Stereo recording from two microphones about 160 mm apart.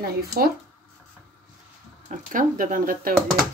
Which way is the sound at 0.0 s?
75° right (ahead or behind).